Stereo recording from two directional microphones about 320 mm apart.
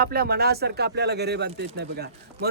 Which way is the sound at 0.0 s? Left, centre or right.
Right.